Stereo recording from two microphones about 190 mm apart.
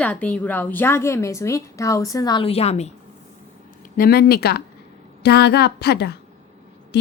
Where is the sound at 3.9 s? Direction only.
55° left (ahead or behind).